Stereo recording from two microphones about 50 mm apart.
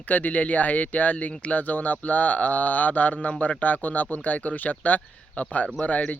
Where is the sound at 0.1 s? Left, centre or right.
Left.